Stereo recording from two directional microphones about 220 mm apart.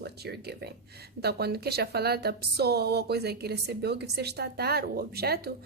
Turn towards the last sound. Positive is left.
turn(degrees=-45)  # may be behind; listen again after turning